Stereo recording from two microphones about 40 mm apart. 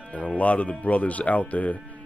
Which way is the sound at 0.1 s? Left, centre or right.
Left.